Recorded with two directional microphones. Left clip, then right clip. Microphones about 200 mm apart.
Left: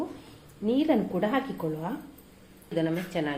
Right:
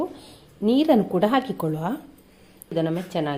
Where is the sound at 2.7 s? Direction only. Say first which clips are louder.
Right 4 dB; 40° right (ahead or behind).